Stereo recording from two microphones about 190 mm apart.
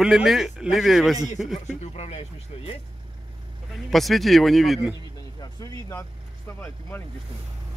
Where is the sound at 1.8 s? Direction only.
35° left (ahead or behind).